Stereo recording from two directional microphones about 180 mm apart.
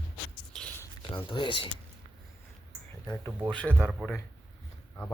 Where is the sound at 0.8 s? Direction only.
25° left (ahead or behind).